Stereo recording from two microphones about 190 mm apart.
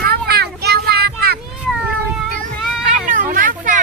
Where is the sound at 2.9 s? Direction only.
45° right (ahead or behind).